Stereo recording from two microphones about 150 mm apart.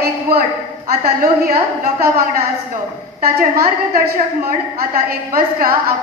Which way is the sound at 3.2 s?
80° right.